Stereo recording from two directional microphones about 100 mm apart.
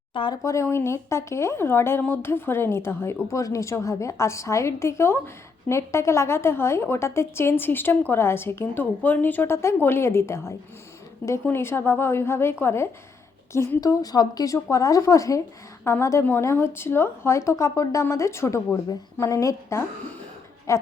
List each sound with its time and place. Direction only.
0.1 s speech: 55° left (ahead or behind)
0.4 s a woman's voice: 30° left (ahead or behind)
14.0 s a woman's voice: 40° left (ahead or behind)